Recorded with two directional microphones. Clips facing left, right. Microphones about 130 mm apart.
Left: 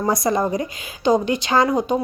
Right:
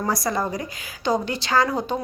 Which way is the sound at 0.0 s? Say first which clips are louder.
Left 5 dB; 20° left (ahead or behind).